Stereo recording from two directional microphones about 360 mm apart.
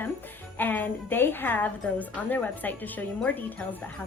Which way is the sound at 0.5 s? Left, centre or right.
Centre.